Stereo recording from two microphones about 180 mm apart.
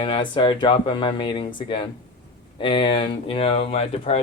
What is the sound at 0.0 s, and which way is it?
Speech, 25° left (ahead or behind).